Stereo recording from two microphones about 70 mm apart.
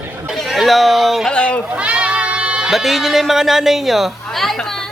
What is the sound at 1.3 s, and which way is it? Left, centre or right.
Speech, centre.